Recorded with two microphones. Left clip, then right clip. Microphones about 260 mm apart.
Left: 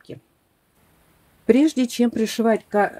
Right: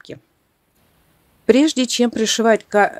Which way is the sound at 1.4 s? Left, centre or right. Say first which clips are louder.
Right 3 dB; right.